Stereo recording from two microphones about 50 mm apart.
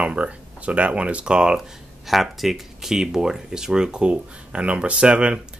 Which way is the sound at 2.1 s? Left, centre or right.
Centre.